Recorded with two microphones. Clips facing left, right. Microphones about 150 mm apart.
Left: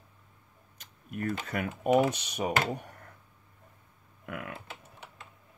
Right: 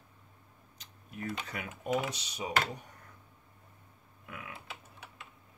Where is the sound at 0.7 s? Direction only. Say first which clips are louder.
Left 7 dB; 50° left (ahead or behind).